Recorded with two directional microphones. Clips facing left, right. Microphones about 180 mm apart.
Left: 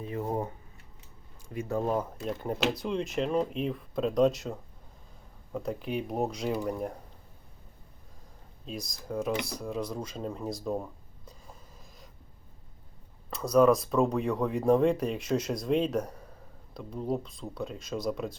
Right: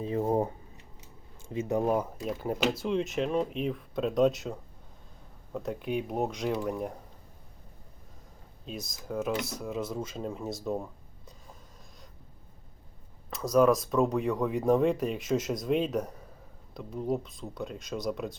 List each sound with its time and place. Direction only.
0.0 s speech: 30° right (ahead or behind)
1.4 s speech: 20° right (ahead or behind); by 4.5 s centre (ahead or behind)
5.5 s speech: centre (ahead or behind)
8.6 s speech: centre (ahead or behind)
13.3 s speech: centre (ahead or behind)